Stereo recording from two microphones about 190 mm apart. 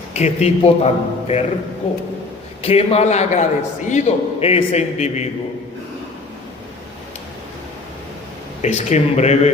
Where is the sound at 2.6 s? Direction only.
35° left (ahead or behind).